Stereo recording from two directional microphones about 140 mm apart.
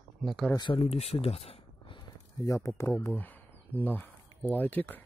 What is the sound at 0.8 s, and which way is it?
Speech, 45° left (ahead or behind).